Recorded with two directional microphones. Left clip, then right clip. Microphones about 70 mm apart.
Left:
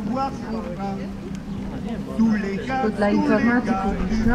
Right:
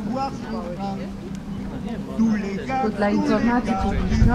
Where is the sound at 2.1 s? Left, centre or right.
Left.